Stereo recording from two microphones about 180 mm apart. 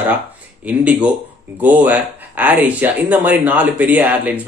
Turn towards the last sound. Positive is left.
turn(degrees=-10)  # may be behind; listen again after turning